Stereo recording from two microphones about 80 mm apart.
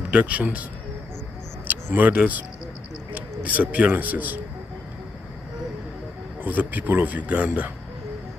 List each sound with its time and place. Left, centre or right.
0.1 s speech: centre
2.0 s a man's voice: centre
6.4 s a man's voice: right